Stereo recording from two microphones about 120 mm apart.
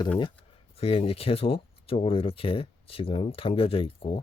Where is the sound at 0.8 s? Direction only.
55° left (ahead or behind).